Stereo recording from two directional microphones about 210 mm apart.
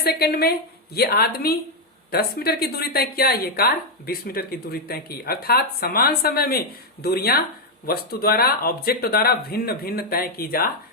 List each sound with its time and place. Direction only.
0.0 s speech: 50° left (ahead or behind)